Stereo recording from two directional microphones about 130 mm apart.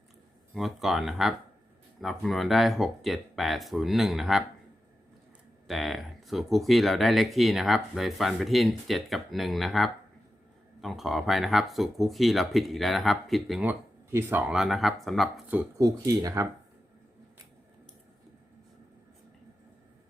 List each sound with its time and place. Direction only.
0.5 s speech: centre (ahead or behind)
5.6 s speech: centre (ahead or behind)
13.6 s speech: 15° right (ahead or behind)
14.5 s speech: 5° right (ahead or behind)
15.8 s speech: 25° right (ahead or behind)